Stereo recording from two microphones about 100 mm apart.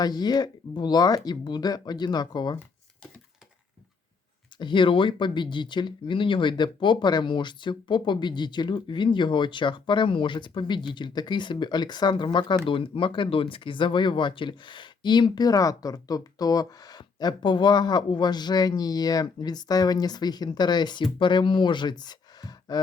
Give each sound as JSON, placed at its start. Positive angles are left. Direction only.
{"t": 0.0, "sound": "speech", "side_deg": 45}
{"t": 4.6, "sound": "speech", "side_deg": 55}